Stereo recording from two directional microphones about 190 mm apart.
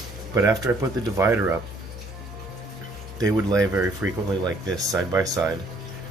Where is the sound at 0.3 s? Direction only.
15° right (ahead or behind).